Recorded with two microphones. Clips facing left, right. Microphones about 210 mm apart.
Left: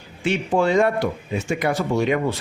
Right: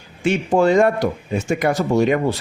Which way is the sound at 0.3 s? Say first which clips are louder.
Right 4 dB; 45° right (ahead or behind).